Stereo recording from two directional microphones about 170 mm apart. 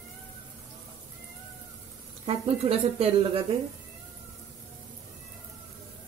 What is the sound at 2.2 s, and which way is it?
Speech, 35° right (ahead or behind).